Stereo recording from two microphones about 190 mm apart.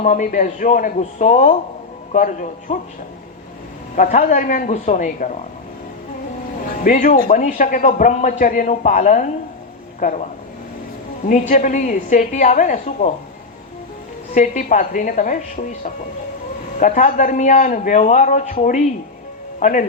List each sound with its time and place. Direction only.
0.0 s a man's voice: 40° left (ahead or behind)
3.9 s a man's voice: 45° left (ahead or behind)
6.8 s a man's voice: 40° left (ahead or behind)
11.3 s a man's voice: 40° left (ahead or behind)
14.3 s a man's voice: 40° left (ahead or behind)